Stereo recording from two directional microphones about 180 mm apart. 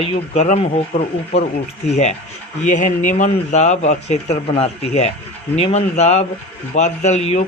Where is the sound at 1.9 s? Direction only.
40° left (ahead or behind).